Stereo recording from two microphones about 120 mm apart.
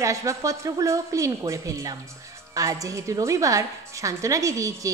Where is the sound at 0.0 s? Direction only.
25° right (ahead or behind).